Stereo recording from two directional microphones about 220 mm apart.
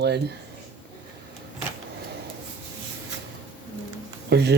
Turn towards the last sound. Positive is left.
turn(degrees=-50)  # may be behind; listen again after turning